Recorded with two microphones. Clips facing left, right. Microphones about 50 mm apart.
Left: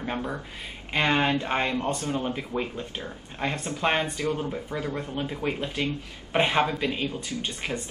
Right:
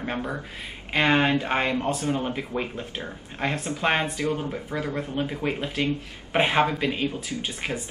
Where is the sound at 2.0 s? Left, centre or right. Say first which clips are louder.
Right 3 dB; right.